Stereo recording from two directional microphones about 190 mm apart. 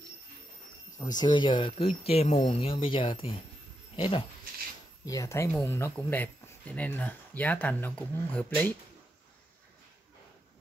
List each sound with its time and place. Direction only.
0.9 s speech: 20° left (ahead or behind)